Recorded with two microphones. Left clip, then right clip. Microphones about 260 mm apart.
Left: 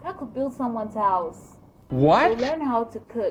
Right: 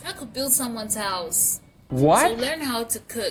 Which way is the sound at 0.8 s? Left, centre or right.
Right.